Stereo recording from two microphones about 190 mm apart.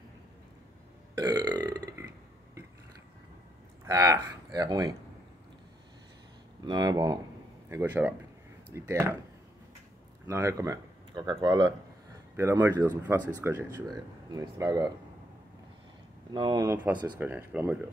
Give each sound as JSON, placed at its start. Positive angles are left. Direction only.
{"t": 1.1, "sound": "burping", "side_deg": -20}
{"t": 3.8, "sound": "speech", "side_deg": -15}
{"t": 6.6, "sound": "speech", "side_deg": -25}
{"t": 7.7, "sound": "speech", "side_deg": -10}
{"t": 10.2, "sound": "speech", "side_deg": -15}
{"t": 12.4, "sound": "speech", "side_deg": -10}
{"t": 16.3, "sound": "speech", "side_deg": -20}